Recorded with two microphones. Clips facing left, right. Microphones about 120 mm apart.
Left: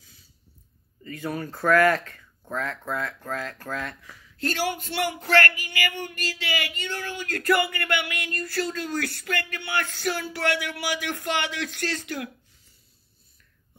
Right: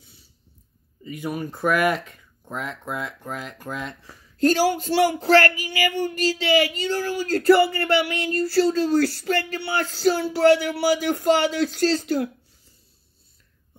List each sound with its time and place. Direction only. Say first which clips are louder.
1.0 s speech: right 2 dB; 15° right (ahead or behind)
4.0 s speech: right 11 dB; 35° right (ahead or behind)